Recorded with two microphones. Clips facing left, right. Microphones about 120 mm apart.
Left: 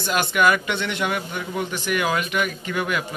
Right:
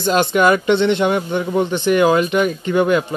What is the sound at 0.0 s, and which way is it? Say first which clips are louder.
Speech: right 5 dB; 25° right (ahead or behind).